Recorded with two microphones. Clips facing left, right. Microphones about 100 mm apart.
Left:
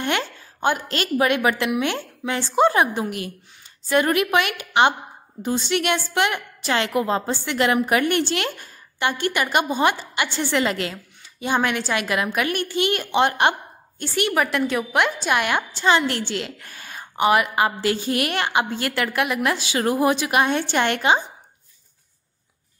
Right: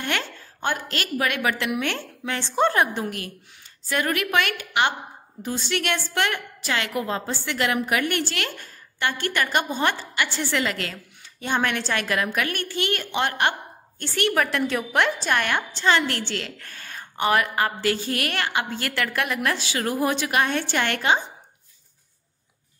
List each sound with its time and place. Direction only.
0.0 s a woman's voice: 20° left (ahead or behind)